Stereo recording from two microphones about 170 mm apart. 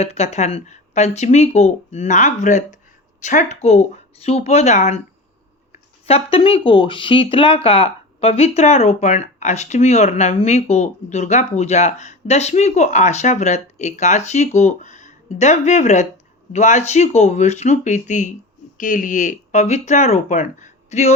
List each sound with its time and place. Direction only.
0.0 s speech: 40° left (ahead or behind)